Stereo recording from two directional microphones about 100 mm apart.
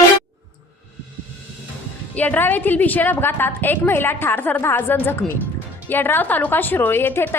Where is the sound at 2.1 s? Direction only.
15° left (ahead or behind).